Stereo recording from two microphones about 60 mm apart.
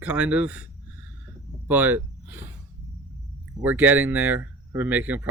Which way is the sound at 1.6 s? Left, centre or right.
Right.